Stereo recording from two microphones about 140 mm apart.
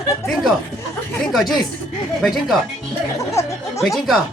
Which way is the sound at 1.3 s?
Centre (ahead or behind).